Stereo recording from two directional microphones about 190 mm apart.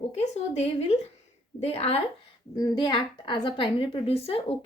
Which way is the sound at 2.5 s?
20° left (ahead or behind).